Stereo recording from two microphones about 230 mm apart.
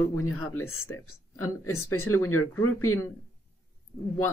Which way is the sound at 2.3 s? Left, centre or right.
Left.